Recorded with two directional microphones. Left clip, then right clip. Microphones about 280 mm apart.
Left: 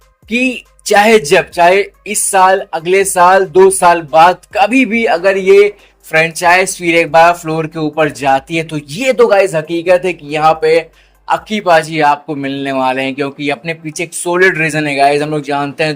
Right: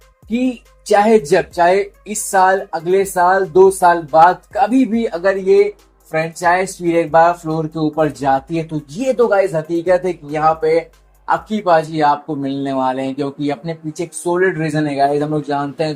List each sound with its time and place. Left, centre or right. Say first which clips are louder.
0.9 s speech: left 4 dB; left